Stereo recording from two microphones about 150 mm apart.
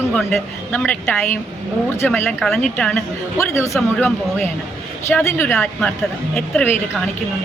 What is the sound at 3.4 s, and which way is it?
A man's voice, 20° left (ahead or behind).